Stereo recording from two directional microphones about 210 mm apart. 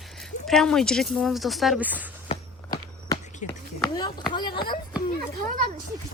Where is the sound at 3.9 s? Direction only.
20° left (ahead or behind).